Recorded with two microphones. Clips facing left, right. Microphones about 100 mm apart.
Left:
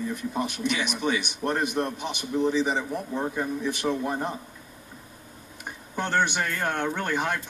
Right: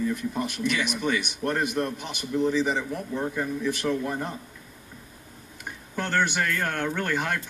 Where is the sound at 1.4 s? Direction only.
15° left (ahead or behind).